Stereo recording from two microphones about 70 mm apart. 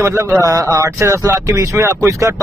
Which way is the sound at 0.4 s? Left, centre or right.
Right.